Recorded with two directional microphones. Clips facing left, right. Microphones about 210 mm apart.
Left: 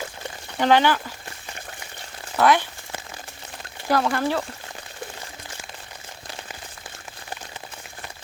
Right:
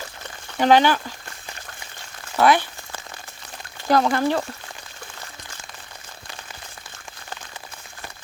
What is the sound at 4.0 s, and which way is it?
Speech, 40° right (ahead or behind).